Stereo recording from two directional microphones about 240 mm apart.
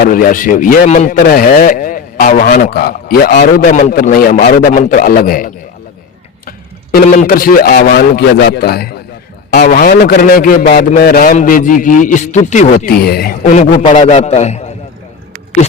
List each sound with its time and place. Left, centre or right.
0.0 s a man's voice: left
6.9 s a man's voice: left